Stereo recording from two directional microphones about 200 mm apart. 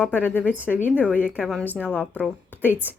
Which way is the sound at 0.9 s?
5° right (ahead or behind).